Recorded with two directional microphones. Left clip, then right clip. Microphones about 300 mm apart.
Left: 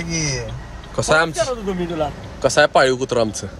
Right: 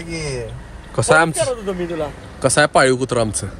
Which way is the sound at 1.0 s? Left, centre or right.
Right.